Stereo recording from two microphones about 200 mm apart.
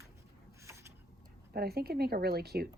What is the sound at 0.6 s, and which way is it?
Mechanisms, 15° right (ahead or behind).